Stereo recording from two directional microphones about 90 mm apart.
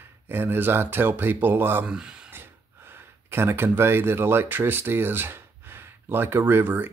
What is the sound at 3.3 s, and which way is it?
Speech, 25° right (ahead or behind).